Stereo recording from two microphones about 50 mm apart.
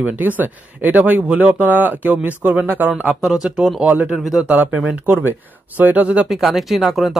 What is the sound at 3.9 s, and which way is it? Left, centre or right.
Speech, right.